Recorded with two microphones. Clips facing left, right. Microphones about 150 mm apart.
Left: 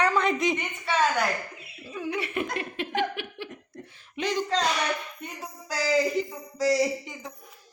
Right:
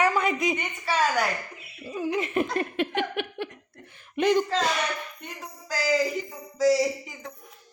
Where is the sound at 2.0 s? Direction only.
40° right (ahead or behind).